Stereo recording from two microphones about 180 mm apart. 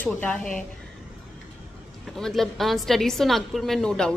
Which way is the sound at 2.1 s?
Centre (ahead or behind).